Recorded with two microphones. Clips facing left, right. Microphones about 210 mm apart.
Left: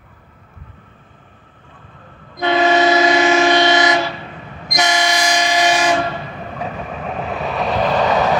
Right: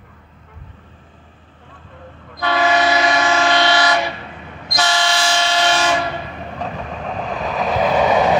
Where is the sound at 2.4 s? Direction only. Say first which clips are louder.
Left 3 dB; 20° left (ahead or behind).